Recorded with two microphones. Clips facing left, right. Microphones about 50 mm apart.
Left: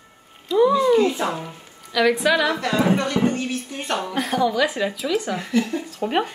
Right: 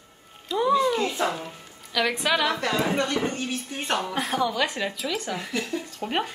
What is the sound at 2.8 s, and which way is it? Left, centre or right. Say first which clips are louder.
Speech: left 5 dB; left.